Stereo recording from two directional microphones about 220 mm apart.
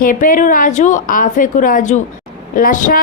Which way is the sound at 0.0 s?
40° left (ahead or behind).